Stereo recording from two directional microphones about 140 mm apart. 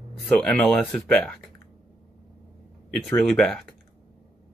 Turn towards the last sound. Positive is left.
turn(degrees=0)  # may be behind; listen again after turning